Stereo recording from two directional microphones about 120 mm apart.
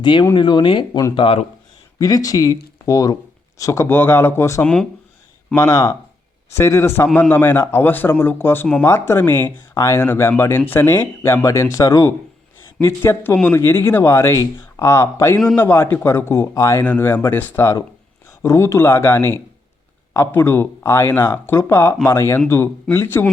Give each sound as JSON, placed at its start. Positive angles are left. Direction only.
{"t": 0.0, "sound": "speech", "side_deg": 40}
{"t": 2.0, "sound": "speech", "side_deg": 30}
{"t": 4.6, "sound": "speech", "side_deg": 5}
{"t": 5.5, "sound": "speech", "side_deg": 25}